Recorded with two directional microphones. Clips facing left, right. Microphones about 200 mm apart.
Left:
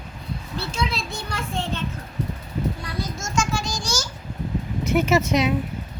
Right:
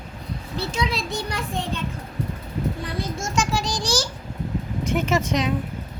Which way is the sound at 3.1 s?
35° right (ahead or behind).